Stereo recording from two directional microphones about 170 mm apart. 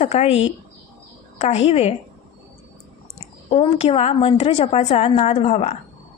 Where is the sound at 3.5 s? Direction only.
35° left (ahead or behind).